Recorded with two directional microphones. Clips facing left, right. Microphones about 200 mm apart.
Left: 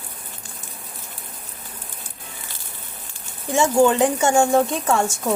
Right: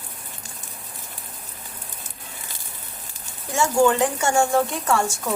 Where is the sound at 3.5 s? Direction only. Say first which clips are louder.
Left 2 dB; 20° left (ahead or behind).